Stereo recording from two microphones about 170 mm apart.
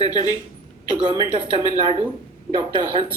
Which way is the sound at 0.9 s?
30° right (ahead or behind).